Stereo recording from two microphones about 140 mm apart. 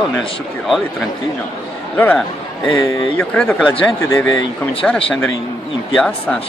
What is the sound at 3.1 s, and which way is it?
Speech, 10° left (ahead or behind).